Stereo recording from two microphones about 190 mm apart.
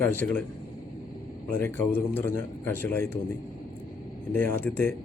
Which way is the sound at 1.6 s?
10° left (ahead or behind).